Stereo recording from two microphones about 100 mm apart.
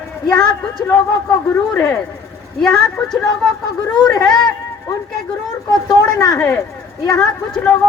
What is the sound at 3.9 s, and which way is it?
Speech, 40° left (ahead or behind).